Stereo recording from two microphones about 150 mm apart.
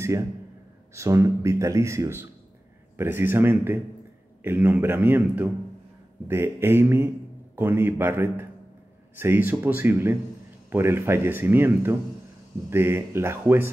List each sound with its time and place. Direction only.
0.9 s speech: 20° right (ahead or behind)